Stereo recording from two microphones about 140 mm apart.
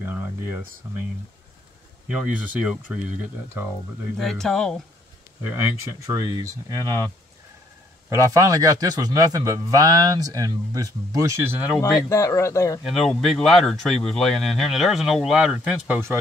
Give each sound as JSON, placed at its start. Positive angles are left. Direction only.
{"t": 0.0, "sound": "a sound", "side_deg": -15}
{"t": 2.0, "sound": "speech", "side_deg": -10}
{"t": 4.2, "sound": "speech", "side_deg": 0}
{"t": 5.4, "sound": "a man's voice", "side_deg": -20}
{"t": 8.1, "sound": "a man's voice", "side_deg": -25}
{"t": 12.1, "sound": "speech", "side_deg": 20}
{"t": 13.1, "sound": "speech", "side_deg": 0}